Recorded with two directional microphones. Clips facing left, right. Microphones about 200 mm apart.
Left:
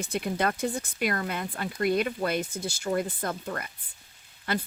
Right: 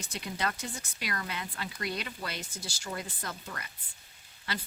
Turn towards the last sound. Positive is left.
turn(degrees=50)  # may be behind; listen again after turning